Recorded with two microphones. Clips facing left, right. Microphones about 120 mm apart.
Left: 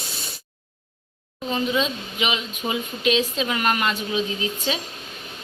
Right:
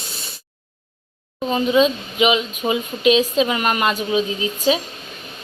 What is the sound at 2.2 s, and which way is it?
Speech, 15° right (ahead or behind).